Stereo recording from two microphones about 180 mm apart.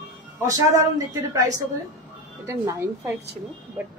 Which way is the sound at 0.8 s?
20° right (ahead or behind).